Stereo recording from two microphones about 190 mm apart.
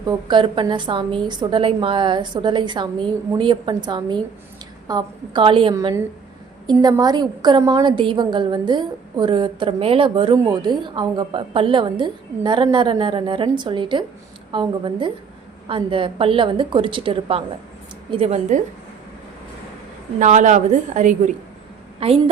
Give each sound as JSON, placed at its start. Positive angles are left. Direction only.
{"t": 0.0, "sound": "a woman's voice", "side_deg": -25}
{"t": 20.1, "sound": "a woman's voice", "side_deg": -40}